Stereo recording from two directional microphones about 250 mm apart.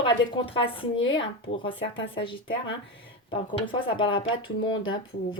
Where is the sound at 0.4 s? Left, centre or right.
Left.